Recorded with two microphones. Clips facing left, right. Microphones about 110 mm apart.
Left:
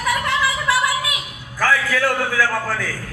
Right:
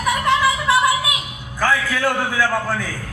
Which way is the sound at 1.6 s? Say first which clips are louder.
Even; 20° right (ahead or behind).